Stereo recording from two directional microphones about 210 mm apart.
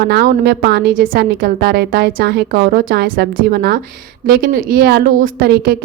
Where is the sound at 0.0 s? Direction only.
50° right (ahead or behind).